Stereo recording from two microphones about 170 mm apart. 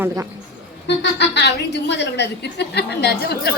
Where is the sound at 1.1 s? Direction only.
85° left.